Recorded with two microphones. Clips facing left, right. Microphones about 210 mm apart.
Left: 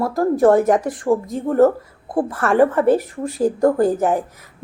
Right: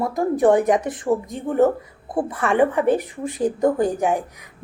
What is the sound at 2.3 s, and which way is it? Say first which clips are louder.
Speech: left 3 dB; centre (ahead or behind).